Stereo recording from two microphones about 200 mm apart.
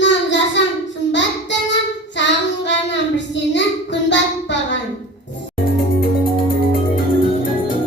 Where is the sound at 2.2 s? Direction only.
60° left (ahead or behind).